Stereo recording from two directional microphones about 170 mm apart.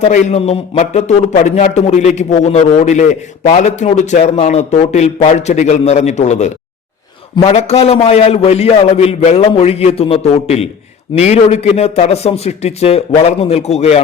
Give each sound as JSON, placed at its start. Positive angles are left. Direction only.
{"t": 0.0, "sound": "a man's voice", "side_deg": 40}